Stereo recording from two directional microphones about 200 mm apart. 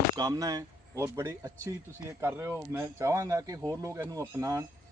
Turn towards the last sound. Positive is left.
turn(degrees=-15)  # may be behind; listen again after turning